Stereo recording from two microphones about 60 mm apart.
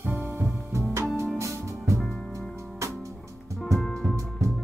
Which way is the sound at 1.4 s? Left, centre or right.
Right.